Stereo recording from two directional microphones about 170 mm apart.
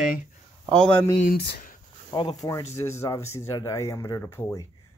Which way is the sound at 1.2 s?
70° left (ahead or behind).